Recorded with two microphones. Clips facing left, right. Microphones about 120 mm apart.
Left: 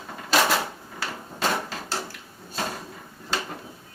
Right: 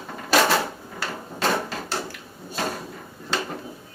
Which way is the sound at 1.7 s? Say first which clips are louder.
Right 2 dB; centre (ahead or behind).